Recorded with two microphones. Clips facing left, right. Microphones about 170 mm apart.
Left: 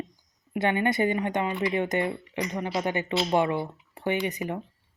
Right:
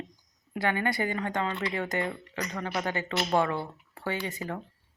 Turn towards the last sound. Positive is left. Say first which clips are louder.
# left 5 dB
turn(degrees=15)  # may be behind; listen again after turning